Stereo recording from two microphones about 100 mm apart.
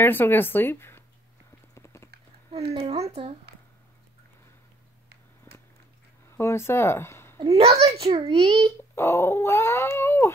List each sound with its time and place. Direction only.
0.0 s cat: 20° left (ahead or behind)
1.8 s typing: 30° left (ahead or behind)
2.5 s speech: 75° right (ahead or behind); by 3.3 s 90° right
5.5 s a sound: 25° left (ahead or behind)
6.3 s speech: 25° left (ahead or behind)
7.4 s a child's voice: 90° right; by 8.7 s 60° right (ahead or behind)
8.9 s cat: 25° left (ahead or behind)